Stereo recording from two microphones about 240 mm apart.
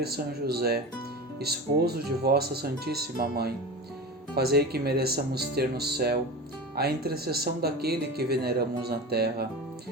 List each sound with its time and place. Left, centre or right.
0.0 s speech: right